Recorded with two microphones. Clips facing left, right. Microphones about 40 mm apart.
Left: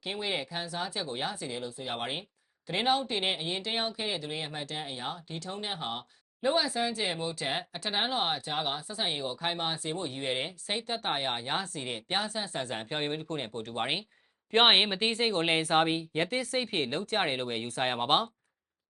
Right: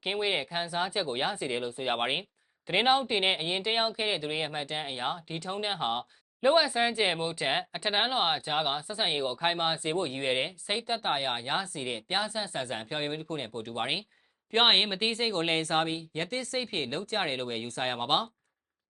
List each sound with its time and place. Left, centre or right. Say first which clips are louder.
0.0 s speech: right 4 dB; right; by 18.3 s centre